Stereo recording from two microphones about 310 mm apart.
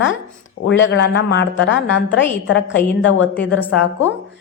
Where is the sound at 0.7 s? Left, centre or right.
Left.